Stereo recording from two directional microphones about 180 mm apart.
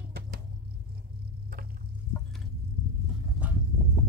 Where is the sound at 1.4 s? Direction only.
55° right (ahead or behind).